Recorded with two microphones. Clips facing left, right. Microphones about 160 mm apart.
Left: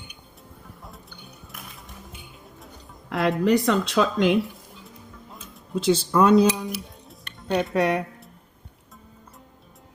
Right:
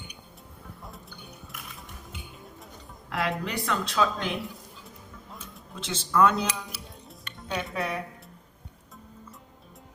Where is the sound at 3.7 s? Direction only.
70° left (ahead or behind).